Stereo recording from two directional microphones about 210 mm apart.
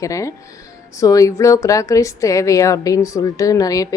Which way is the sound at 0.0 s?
15° left (ahead or behind).